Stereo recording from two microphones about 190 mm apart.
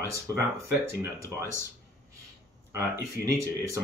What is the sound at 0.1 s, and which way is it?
Speech, 15° right (ahead or behind).